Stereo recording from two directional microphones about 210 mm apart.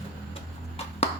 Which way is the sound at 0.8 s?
30° left (ahead or behind).